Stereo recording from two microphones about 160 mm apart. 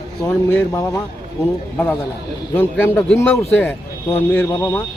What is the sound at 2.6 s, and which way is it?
A man's voice, 15° left (ahead or behind).